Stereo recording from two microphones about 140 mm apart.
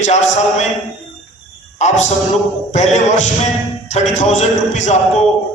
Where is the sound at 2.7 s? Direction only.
55° left (ahead or behind).